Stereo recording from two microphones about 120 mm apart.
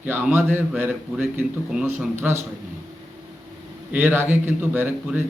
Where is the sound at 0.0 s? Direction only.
15° right (ahead or behind).